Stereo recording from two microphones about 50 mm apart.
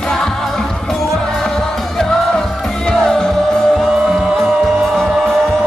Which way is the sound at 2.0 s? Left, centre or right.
Centre.